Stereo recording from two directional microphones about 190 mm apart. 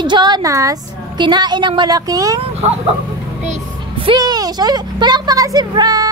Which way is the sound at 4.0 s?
25° right (ahead or behind).